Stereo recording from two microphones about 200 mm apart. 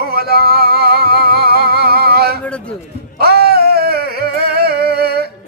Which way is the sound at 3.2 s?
50° right (ahead or behind).